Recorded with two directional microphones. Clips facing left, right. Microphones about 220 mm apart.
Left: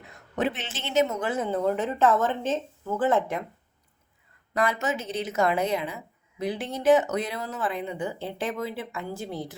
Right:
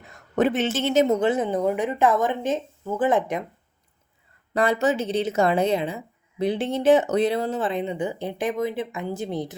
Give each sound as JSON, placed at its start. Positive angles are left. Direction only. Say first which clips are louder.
{"t": 0.3, "sound": "speech", "louder": "right 8 dB", "side_deg": -45}
{"t": 1.3, "sound": "speech", "louder": "right 3 dB", "side_deg": -20}
{"t": 4.5, "sound": "speech", "louder": "right 5 dB", "side_deg": -30}